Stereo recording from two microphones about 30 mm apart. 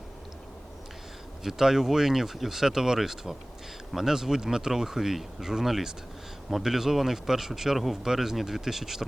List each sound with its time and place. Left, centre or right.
1.5 s speech: centre